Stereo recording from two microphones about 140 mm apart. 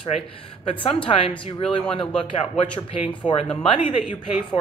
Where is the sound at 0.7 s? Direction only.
40° left (ahead or behind).